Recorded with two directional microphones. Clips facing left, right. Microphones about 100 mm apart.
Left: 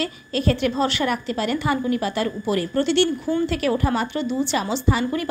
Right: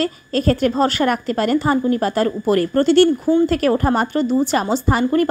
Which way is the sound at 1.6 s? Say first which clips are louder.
Right 5 dB; 40° right (ahead or behind).